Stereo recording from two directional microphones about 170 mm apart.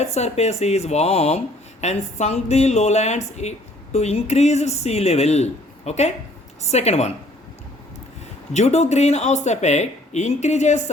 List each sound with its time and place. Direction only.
0.0 s speech: 40° left (ahead or behind)
8.5 s speech: 40° left (ahead or behind)